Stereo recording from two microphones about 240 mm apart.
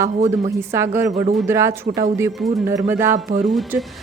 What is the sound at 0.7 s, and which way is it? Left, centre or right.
A woman's voice, centre.